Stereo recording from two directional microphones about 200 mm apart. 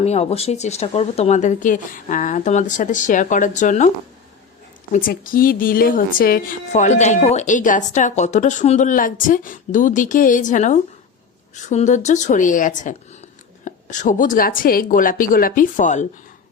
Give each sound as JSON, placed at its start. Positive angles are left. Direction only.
{"t": 0.0, "sound": "a woman's voice", "side_deg": 30}